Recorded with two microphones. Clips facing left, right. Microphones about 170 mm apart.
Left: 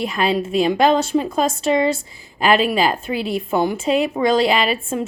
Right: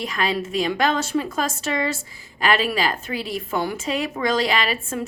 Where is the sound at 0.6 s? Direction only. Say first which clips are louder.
Left 7 dB; 30° left (ahead or behind).